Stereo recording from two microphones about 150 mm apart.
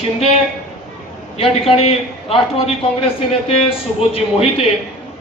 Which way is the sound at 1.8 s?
40° left (ahead or behind).